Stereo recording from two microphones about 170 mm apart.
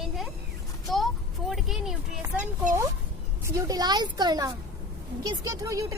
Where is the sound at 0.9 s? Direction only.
Centre (ahead or behind).